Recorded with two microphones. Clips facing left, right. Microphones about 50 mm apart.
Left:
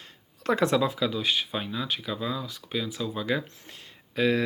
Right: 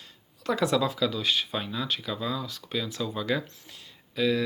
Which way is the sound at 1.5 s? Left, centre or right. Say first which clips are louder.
Even; centre.